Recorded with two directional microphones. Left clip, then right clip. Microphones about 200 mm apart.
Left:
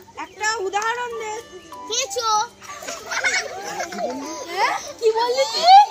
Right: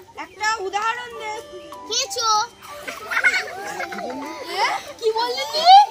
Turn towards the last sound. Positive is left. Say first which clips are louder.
# even
turn(degrees=0)  # may be behind; listen again after turning